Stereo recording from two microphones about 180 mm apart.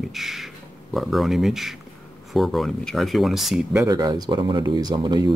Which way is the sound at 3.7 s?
20° right (ahead or behind).